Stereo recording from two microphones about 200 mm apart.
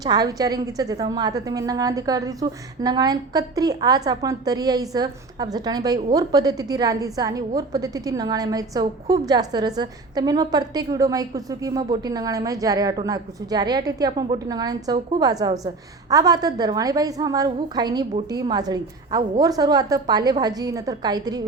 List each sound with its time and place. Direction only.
0.0 s a woman's voice: 20° right (ahead or behind)